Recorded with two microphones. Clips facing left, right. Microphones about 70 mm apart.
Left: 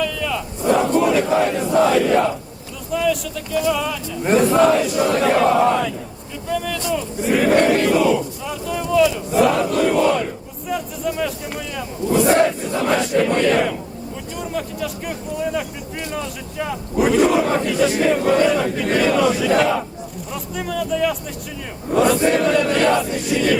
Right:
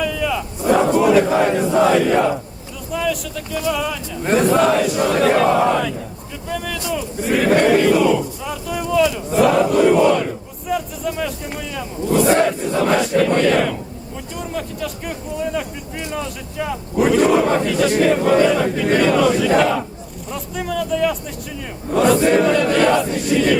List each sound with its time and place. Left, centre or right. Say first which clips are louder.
0.0 s battle cry: right 2 dB; centre
1.5 s crowd: right 1 dB; centre
2.9 s speech: left 2 dB; centre